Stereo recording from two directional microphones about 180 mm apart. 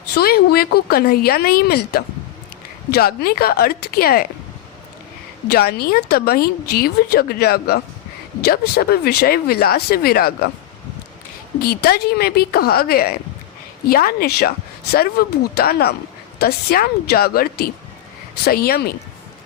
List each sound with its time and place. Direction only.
0.2 s speech: 60° left (ahead or behind)
5.5 s speech: 60° left (ahead or behind)
11.6 s speech: 60° left (ahead or behind)